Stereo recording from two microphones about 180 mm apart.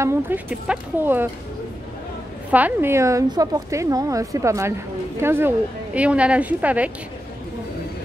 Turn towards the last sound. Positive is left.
turn(degrees=-10)  # may be behind; listen again after turning